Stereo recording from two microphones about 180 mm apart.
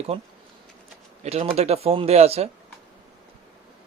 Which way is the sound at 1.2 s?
35° right (ahead or behind).